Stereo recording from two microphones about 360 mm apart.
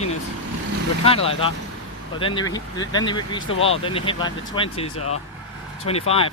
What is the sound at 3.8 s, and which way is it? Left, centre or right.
Speech, centre.